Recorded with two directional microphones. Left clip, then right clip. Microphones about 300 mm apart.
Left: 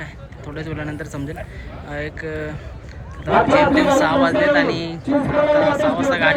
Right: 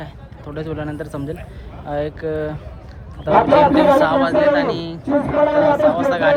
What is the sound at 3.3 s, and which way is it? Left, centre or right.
Speech, right.